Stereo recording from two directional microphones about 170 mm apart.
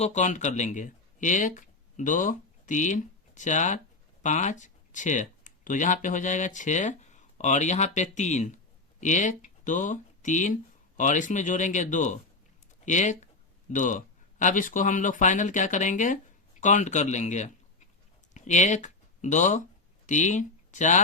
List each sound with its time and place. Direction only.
0.0 s speech: 45° left (ahead or behind)